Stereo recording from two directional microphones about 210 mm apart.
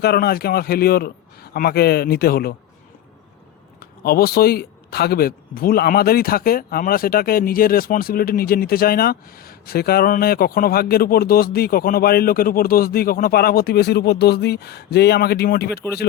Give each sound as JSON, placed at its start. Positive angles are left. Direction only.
{"t": 0.0, "sound": "speech", "side_deg": 50}
{"t": 3.8, "sound": "speech", "side_deg": 45}